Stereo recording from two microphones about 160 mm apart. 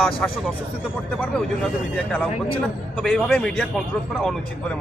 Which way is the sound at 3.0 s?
Centre (ahead or behind).